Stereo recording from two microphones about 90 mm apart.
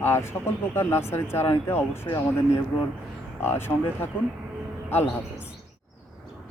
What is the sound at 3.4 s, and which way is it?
Speech, 25° left (ahead or behind).